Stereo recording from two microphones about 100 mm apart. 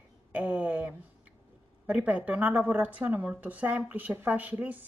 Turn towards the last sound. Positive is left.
turn(degrees=-15)  # may be behind; listen again after turning